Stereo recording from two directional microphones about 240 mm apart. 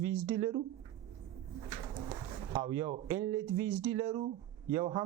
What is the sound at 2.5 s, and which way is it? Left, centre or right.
Speech, centre.